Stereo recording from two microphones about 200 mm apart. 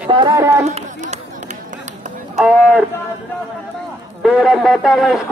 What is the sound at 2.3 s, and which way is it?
Speech, 5° right (ahead or behind).